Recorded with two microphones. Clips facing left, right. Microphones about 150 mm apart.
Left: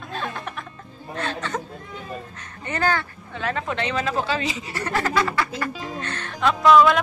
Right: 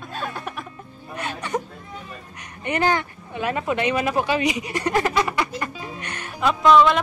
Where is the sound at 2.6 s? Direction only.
15° right (ahead or behind).